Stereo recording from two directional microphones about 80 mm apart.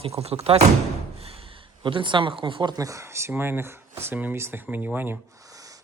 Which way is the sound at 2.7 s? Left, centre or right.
Right.